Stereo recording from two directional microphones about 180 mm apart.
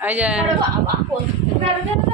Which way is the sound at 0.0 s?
10° right (ahead or behind).